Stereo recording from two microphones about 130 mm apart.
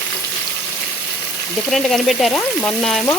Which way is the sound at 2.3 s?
15° left (ahead or behind).